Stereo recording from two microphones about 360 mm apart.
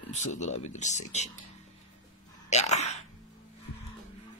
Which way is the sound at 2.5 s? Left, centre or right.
Centre.